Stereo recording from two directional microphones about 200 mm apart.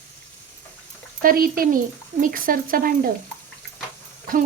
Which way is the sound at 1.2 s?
45° right (ahead or behind).